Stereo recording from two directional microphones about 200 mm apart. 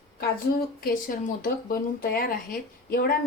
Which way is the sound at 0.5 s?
45° left (ahead or behind).